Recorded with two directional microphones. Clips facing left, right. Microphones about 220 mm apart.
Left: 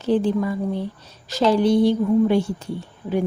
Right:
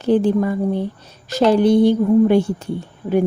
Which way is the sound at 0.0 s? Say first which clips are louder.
Right 4 dB; 55° right (ahead or behind).